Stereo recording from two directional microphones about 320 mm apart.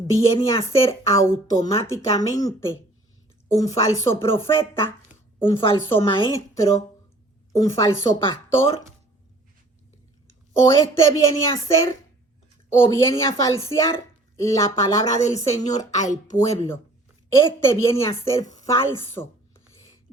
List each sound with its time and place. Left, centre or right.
0.1 s speech: centre
10.2 s a woman's voice: centre
12.7 s speech: centre
15.8 s speech: left
16.5 s a woman's voice: centre